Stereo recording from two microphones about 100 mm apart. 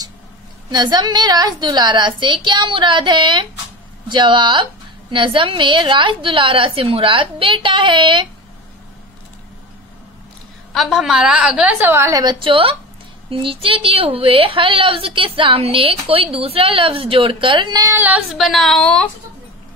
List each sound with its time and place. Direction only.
0.7 s a woman's voice: 45° right (ahead or behind)
10.7 s a woman's voice: centre (ahead or behind)
11.8 s a woman's voice: 25° right (ahead or behind)
12.1 s a woman's voice: 40° right (ahead or behind)
12.4 s a woman's voice: 60° right (ahead or behind)
17.9 s a woman's voice: 15° right (ahead or behind)
18.3 s a woman's voice: centre (ahead or behind)